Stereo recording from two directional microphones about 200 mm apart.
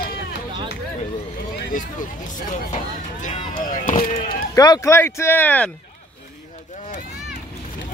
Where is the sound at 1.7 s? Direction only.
40° left (ahead or behind).